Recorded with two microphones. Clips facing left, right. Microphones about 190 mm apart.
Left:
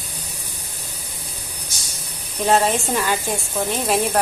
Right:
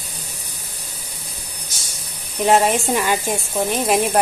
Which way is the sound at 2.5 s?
15° right (ahead or behind).